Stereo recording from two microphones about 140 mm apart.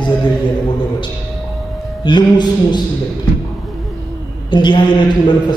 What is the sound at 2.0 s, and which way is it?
Speech, 30° left (ahead or behind).